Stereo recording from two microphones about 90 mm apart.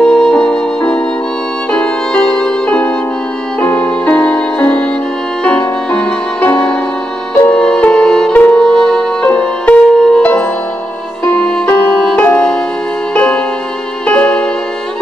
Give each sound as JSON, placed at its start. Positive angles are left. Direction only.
{"t": 0.0, "sound": "music", "side_deg": 10}